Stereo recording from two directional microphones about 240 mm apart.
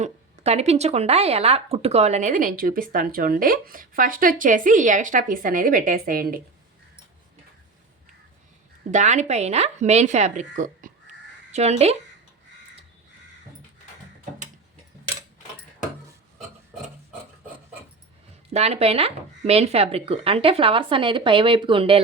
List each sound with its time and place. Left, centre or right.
0.0 s speech: right
8.9 s speech: right
18.5 s speech: right